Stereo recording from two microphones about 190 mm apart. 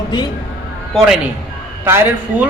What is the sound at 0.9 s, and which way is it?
Speech, centre (ahead or behind).